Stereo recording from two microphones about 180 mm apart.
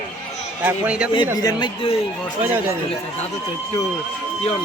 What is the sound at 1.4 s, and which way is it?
Speech, 20° left (ahead or behind).